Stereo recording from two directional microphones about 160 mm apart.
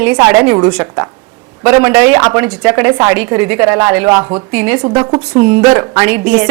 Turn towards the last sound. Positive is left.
turn(degrees=-5)  # may be behind; listen again after turning